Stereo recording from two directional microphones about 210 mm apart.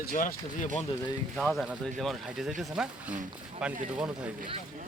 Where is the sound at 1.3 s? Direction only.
Centre (ahead or behind).